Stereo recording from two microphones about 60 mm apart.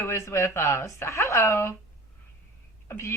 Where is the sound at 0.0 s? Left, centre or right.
Left.